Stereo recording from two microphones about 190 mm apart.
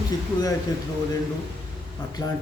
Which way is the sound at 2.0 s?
20° left (ahead or behind).